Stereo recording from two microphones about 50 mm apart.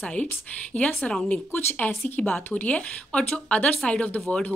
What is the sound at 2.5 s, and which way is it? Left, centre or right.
A woman's voice, left.